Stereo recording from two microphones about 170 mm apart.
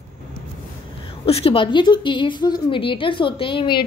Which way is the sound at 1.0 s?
35° left (ahead or behind).